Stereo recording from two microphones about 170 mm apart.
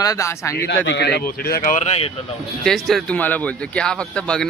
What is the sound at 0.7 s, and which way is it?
Speech, 90° left.